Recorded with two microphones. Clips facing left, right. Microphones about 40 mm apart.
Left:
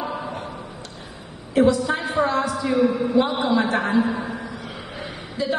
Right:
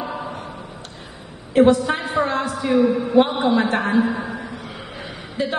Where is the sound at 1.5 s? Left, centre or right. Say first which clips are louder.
Right 3 dB; right.